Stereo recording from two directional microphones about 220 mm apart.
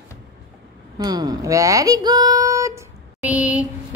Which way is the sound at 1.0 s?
15° right (ahead or behind).